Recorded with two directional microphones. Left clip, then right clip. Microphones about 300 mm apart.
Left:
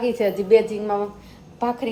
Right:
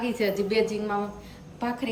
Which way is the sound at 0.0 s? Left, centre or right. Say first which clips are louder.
Left 5 dB; centre.